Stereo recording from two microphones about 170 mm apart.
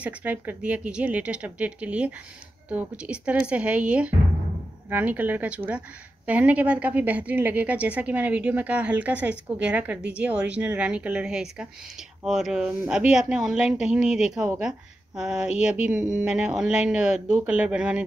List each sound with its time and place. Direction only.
0.0 s a woman's voice: 10° right (ahead or behind)